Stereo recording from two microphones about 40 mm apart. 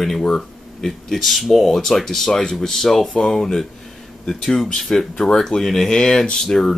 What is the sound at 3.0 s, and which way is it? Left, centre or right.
Speech, left.